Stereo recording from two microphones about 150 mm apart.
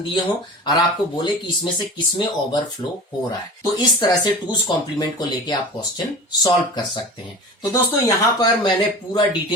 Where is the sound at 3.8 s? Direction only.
25° left (ahead or behind).